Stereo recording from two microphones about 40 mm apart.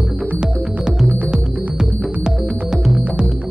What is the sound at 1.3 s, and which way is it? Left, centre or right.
Music, centre.